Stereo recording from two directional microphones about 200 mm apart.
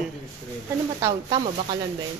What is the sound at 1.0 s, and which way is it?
Speech, 25° right (ahead or behind).